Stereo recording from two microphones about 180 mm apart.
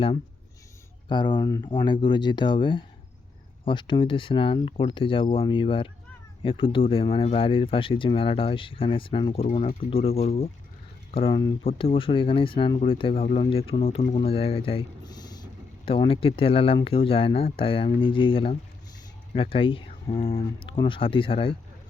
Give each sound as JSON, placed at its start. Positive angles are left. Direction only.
{"t": 1.0, "sound": "speech", "side_deg": 25}